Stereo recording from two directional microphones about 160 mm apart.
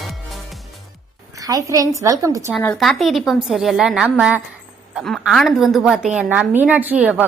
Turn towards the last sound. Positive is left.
turn(degrees=-10)  # may be behind; listen again after turning